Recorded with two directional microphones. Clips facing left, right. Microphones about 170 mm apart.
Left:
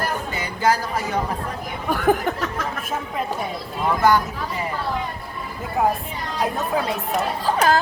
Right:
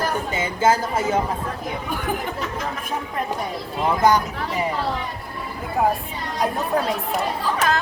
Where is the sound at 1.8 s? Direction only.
45° left (ahead or behind).